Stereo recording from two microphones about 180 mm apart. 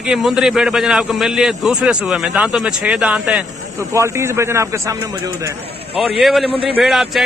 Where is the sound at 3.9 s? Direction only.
15° right (ahead or behind).